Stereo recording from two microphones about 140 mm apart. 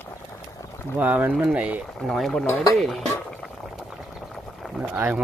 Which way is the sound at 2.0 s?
Centre (ahead or behind).